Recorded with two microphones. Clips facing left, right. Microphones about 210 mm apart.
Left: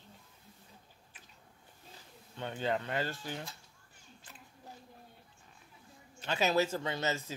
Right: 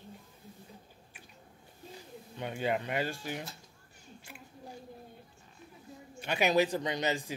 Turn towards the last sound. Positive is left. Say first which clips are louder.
# right 3 dB
turn(degrees=-15)  # may be behind; listen again after turning